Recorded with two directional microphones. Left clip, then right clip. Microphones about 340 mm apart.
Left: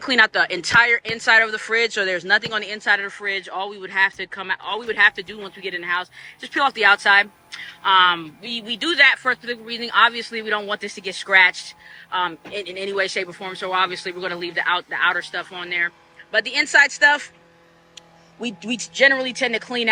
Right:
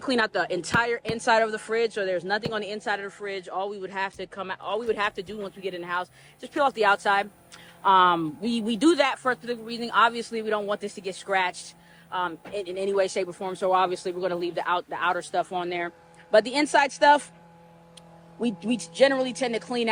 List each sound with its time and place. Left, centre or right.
0.0 s speech: centre
18.3 s speech: centre